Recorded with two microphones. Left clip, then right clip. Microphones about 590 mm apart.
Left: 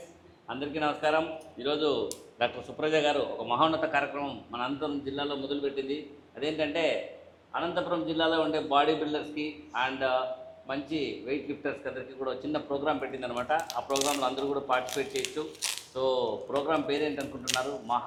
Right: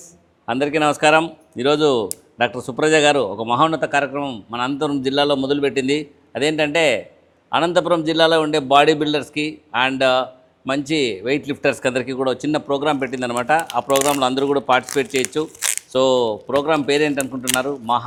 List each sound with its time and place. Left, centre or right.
0.4 s speech: right